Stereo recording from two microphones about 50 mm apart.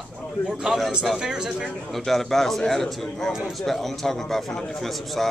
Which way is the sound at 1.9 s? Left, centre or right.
Centre.